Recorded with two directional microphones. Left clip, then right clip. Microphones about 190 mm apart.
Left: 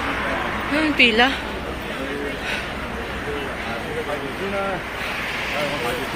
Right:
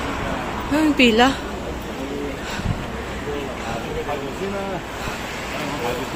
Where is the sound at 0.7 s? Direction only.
35° right (ahead or behind).